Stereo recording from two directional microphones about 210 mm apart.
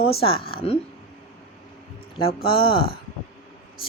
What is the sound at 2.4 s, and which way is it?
Speech, 25° left (ahead or behind).